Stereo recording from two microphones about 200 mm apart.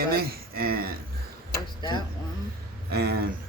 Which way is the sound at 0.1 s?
50° right (ahead or behind).